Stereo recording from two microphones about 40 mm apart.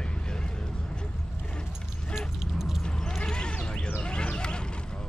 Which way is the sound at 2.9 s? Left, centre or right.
Centre.